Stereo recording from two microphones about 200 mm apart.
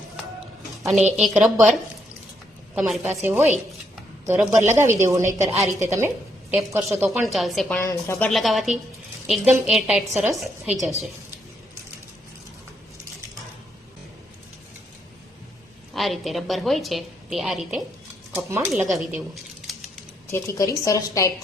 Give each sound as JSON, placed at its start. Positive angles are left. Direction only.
{"t": 0.8, "sound": "a woman's voice", "side_deg": 0}
{"t": 2.7, "sound": "a woman's voice", "side_deg": 0}
{"t": 5.5, "sound": "a woman's voice", "side_deg": 0}
{"t": 7.9, "sound": "a woman's voice", "side_deg": 15}
{"t": 8.3, "sound": "a woman's voice", "side_deg": 0}
{"t": 16.0, "sound": "a woman's voice", "side_deg": 0}
{"t": 18.3, "sound": "a woman's voice", "side_deg": -15}
{"t": 18.7, "sound": "speech", "side_deg": 0}
{"t": 20.3, "sound": "a woman's voice", "side_deg": 15}